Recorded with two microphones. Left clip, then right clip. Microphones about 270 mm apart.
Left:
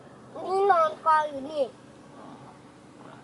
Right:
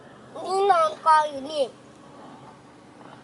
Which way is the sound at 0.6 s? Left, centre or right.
Centre.